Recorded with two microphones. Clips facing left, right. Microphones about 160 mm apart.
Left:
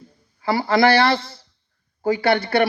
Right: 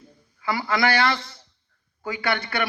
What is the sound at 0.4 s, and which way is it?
A man's voice, 35° left (ahead or behind).